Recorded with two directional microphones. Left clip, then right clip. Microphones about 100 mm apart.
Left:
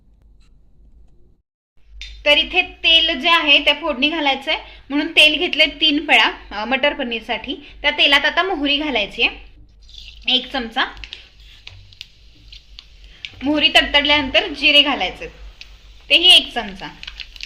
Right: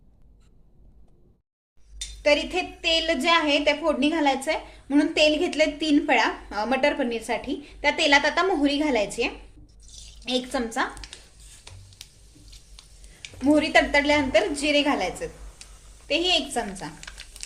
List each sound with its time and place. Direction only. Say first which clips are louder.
2.2 s a woman's voice: left 7 dB; 20° right (ahead or behind)
11.1 s a sound: left 9 dB; 35° right (ahead or behind)
13.6 s a woman's voice: left 8 dB; 25° right (ahead or behind)